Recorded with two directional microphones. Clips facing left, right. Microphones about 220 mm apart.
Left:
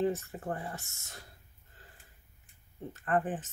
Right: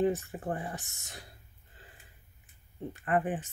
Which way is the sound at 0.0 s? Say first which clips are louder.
Right 2 dB; 15° right (ahead or behind).